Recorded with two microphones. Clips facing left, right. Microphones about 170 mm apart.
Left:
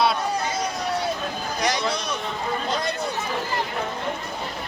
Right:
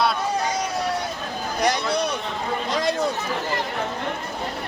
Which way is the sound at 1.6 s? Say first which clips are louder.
Right 3 dB; 60° right (ahead or behind).